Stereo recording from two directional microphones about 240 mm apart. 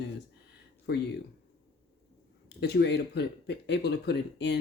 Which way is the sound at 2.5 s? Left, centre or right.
Left.